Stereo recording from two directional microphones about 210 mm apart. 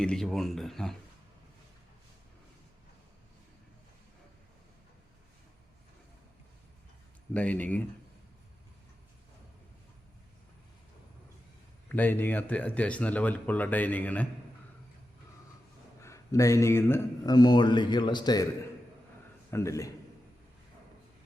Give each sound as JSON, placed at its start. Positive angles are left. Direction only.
{"t": 0.0, "sound": "speech", "side_deg": 5}
{"t": 7.3, "sound": "speech", "side_deg": 5}
{"t": 11.9, "sound": "speech", "side_deg": 10}
{"t": 16.0, "sound": "speech", "side_deg": 15}
{"t": 19.5, "sound": "speech", "side_deg": 15}